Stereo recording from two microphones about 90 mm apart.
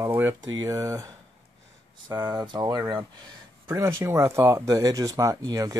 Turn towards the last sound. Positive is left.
turn(degrees=-40)  # may be behind; listen again after turning